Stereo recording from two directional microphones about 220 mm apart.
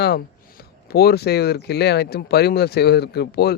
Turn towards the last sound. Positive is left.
turn(degrees=45)  # may be behind; listen again after turning